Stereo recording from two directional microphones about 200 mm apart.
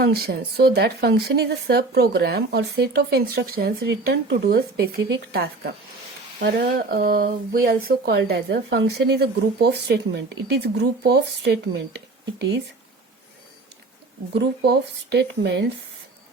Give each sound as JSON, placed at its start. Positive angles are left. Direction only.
{"t": 0.0, "sound": "speech", "side_deg": -50}
{"t": 14.3, "sound": "speech", "side_deg": -55}